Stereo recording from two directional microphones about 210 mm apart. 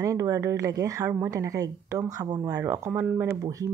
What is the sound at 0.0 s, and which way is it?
Speech, 15° right (ahead or behind).